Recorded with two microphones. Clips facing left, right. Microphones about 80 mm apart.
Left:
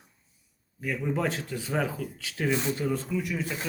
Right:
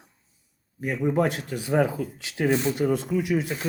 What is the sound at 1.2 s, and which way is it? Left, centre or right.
Speech, right.